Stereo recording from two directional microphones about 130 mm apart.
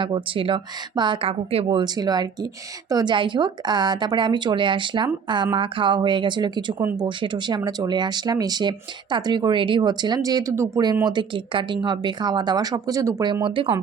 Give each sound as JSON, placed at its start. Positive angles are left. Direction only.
{"t": 0.0, "sound": "speech", "side_deg": -40}
{"t": 11.0, "sound": "speech", "side_deg": -35}
{"t": 13.2, "sound": "speech", "side_deg": -35}